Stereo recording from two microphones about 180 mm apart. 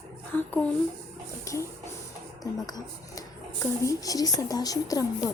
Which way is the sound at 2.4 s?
20° left (ahead or behind).